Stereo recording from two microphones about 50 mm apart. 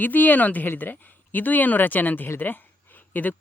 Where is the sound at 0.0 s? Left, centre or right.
Left.